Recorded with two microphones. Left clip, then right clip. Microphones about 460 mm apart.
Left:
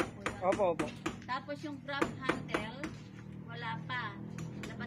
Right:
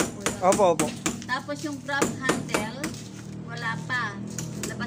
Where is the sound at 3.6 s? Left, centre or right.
Left.